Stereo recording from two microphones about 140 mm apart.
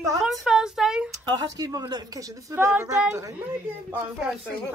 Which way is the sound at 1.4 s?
25° right (ahead or behind).